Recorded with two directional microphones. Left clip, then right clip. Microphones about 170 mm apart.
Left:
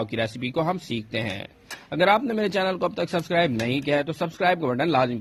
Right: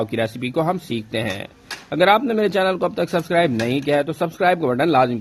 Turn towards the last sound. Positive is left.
turn(degrees=20)  # may be behind; listen again after turning